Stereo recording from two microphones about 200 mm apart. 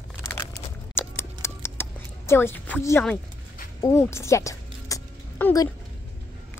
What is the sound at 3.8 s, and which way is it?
Music, 15° left (ahead or behind).